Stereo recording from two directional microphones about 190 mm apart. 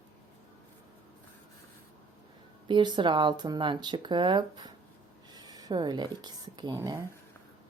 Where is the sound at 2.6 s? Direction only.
25° right (ahead or behind).